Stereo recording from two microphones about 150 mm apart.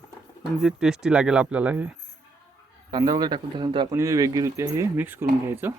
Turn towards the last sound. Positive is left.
turn(degrees=-15)  # may be behind; listen again after turning